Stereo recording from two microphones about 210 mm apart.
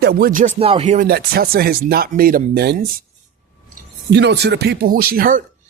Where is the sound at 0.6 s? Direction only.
30° right (ahead or behind); by 2.7 s 45° right (ahead or behind).